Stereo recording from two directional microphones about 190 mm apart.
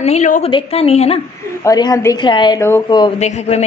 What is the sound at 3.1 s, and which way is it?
Speech, 35° left (ahead or behind).